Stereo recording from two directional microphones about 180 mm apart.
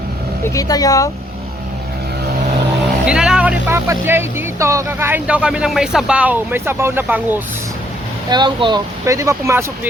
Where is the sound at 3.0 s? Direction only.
5° right (ahead or behind).